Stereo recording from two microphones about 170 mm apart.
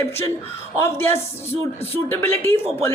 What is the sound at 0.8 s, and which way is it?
A woman's voice, 15° left (ahead or behind).